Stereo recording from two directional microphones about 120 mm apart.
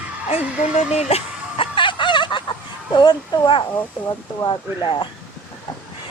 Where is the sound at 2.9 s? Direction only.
40° left (ahead or behind).